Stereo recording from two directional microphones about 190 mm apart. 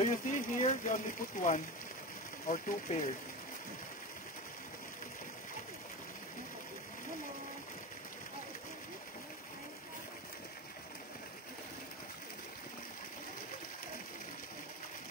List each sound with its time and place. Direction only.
0.0 s speech: 40° left (ahead or behind)